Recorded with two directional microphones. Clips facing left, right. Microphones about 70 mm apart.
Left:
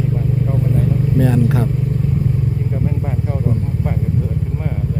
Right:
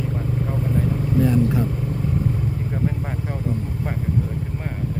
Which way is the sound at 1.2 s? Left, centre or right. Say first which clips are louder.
Left 2 dB; left.